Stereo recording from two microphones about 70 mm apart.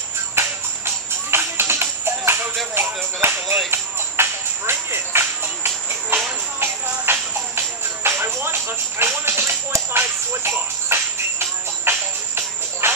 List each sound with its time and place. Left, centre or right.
0.4 s music: right